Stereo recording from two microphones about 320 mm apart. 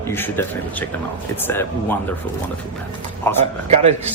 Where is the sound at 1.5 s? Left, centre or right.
Centre.